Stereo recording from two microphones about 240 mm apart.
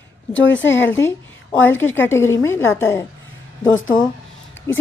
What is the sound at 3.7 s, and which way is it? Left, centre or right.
Speech, left.